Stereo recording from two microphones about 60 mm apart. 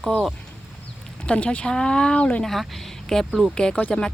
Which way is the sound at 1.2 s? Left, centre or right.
Left.